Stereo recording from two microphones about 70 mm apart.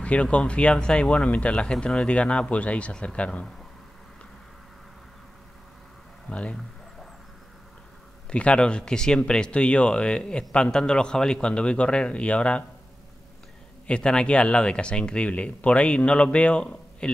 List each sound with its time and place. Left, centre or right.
0.0 s speech: centre
6.3 s speech: centre
8.3 s speech: centre
13.8 s speech: centre